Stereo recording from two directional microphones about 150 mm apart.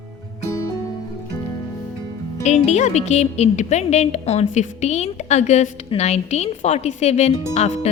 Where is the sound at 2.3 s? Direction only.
50° left (ahead or behind).